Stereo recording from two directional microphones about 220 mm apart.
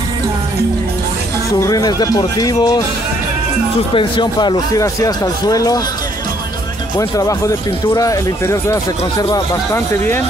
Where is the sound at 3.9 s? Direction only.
20° left (ahead or behind).